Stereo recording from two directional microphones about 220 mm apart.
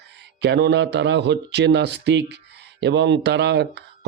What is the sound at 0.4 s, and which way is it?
Speech, 50° right (ahead or behind).